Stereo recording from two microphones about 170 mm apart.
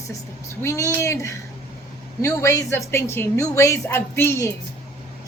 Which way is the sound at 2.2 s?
20° left (ahead or behind).